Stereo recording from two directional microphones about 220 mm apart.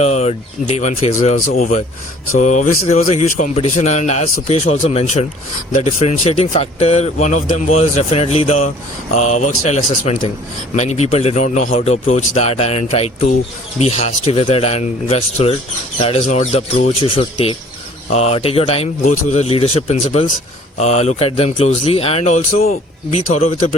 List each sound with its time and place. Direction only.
0.0 s speech: 30° left (ahead or behind)